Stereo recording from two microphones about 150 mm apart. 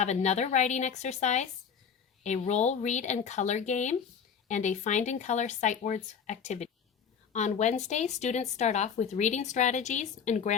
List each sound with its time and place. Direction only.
0.0 s speech: 50° left (ahead or behind)